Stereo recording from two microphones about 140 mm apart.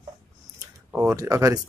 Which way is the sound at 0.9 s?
20° right (ahead or behind).